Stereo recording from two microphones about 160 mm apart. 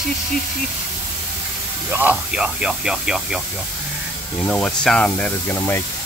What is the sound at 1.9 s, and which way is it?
Speech, 10° right (ahead or behind).